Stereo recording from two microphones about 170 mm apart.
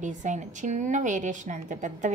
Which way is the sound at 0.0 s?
45° right (ahead or behind).